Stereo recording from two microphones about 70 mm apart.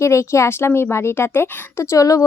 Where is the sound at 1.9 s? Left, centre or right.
Left.